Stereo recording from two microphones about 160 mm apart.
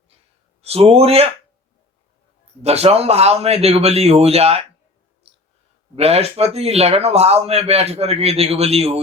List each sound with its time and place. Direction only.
0.6 s speech: 40° right (ahead or behind)
2.6 s speech: 40° right (ahead or behind)
6.0 s speech: 40° right (ahead or behind)